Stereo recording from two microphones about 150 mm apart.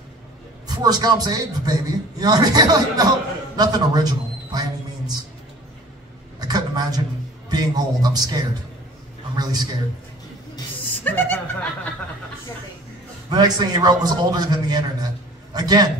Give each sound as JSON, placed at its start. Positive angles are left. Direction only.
{"t": 0.7, "sound": "a man's voice", "side_deg": -25}
{"t": 6.4, "sound": "a sound", "side_deg": -30}
{"t": 7.4, "sound": "a man's voice", "side_deg": -25}
{"t": 11.1, "sound": "speech", "side_deg": 10}
{"t": 13.3, "sound": "a man's voice", "side_deg": -30}